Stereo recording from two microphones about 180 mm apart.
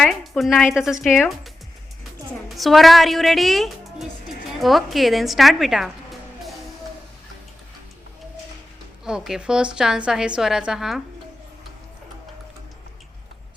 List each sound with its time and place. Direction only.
0.0 s a woman's voice: centre (ahead or behind)
2.6 s a woman's voice: centre (ahead or behind)
9.0 s a woman's voice: 5° right (ahead or behind)